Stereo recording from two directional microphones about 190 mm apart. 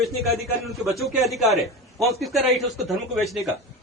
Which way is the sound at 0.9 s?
Centre (ahead or behind).